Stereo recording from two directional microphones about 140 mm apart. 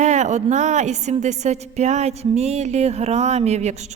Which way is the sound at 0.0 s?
55° right (ahead or behind).